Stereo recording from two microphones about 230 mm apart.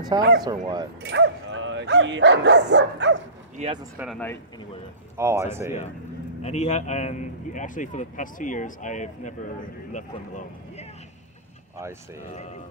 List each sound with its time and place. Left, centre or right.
0.4 s speech: centre
1.0 s speech: right
3.5 s speech: right
5.1 s speech: centre
6.4 s a man's voice: left